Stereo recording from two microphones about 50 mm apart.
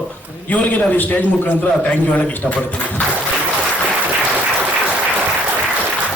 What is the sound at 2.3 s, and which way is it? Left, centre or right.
Speech, left.